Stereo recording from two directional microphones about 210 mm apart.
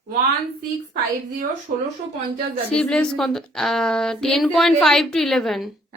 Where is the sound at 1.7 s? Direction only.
40° right (ahead or behind).